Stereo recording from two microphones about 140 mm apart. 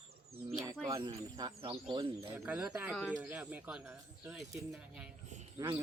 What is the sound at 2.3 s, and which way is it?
Speech, 10° right (ahead or behind).